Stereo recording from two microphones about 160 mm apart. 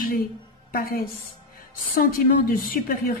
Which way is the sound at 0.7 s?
65° left (ahead or behind).